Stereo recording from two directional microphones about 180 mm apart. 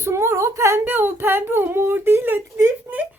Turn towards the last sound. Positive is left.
turn(degrees=-10)  # may be behind; listen again after turning